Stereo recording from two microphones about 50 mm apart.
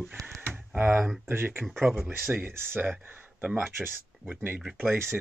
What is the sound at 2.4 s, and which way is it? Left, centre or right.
Speech, right.